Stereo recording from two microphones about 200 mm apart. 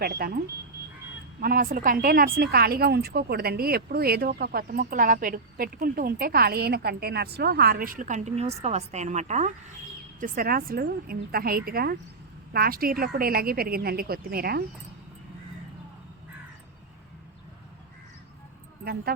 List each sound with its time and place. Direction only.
0.0 s a woman's voice: 50° right (ahead or behind)
1.4 s a woman's voice: 45° right (ahead or behind)